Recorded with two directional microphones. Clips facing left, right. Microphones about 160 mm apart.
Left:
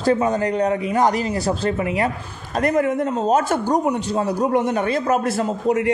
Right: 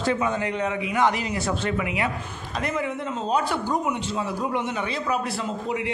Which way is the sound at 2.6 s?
45° left (ahead or behind).